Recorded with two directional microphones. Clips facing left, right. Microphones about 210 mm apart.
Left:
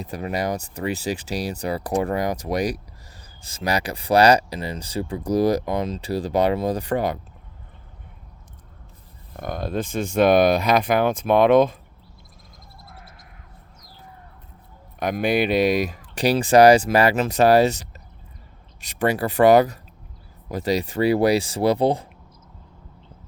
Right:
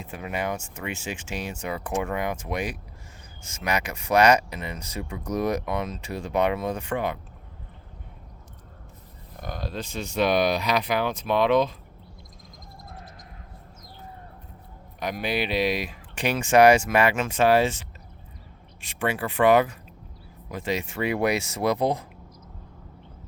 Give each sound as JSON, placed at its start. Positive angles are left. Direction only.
{"t": 0.0, "sound": "speech", "side_deg": 35}
{"t": 9.4, "sound": "speech", "side_deg": 50}
{"t": 14.9, "sound": "speech", "side_deg": 50}